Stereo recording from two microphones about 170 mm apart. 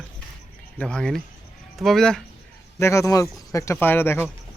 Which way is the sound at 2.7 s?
15° left (ahead or behind).